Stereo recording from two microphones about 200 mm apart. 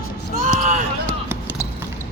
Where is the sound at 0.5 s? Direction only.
40° right (ahead or behind).